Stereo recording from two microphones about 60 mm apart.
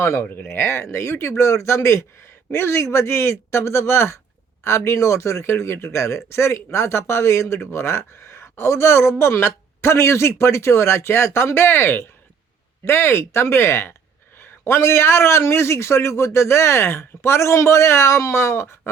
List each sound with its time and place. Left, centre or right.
0.0 s speech: left